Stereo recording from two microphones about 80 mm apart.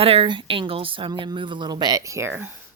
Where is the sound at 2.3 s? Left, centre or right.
Right.